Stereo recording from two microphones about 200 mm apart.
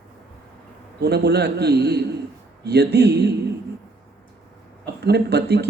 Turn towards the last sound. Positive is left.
turn(degrees=-55)  # may be behind; listen again after turning